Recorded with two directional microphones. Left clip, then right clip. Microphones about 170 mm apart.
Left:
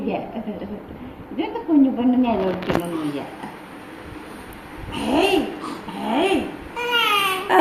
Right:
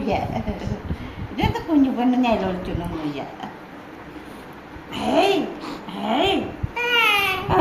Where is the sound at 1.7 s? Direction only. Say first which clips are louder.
Left 2 dB; 35° right (ahead or behind).